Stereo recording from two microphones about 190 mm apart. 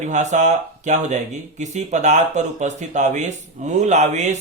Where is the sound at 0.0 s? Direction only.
40° right (ahead or behind).